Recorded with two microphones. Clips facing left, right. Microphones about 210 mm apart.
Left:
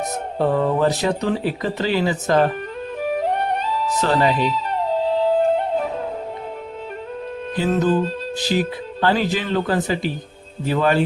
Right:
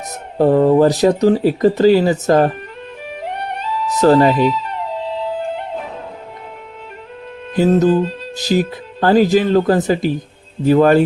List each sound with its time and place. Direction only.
0.3 s speech: 40° right (ahead or behind)
3.0 s music: 40° left (ahead or behind)
4.0 s speech: 40° right (ahead or behind)
4.7 s music: 40° left (ahead or behind)
7.5 s speech: 40° right (ahead or behind)